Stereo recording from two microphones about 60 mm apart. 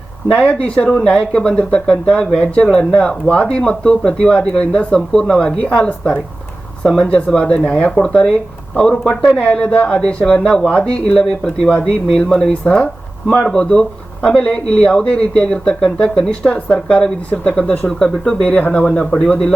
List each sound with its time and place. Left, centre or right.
0.3 s speech: centre
7.3 s speech: centre